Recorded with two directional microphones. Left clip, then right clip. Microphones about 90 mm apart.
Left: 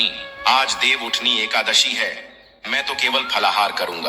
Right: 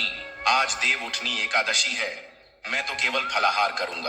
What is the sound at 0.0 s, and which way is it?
A man's voice, 40° left (ahead or behind).